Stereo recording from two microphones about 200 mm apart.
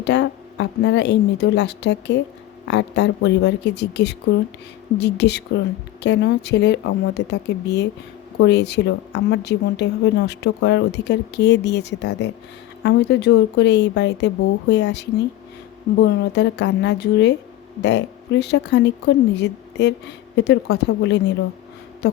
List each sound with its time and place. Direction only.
0.0 s a woman's voice: 60° left (ahead or behind)